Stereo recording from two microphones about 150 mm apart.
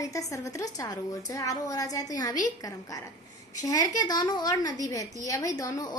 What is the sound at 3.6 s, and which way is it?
A woman's voice, 25° left (ahead or behind).